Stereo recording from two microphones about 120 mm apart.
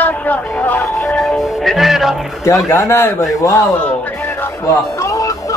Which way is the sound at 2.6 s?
20° left (ahead or behind).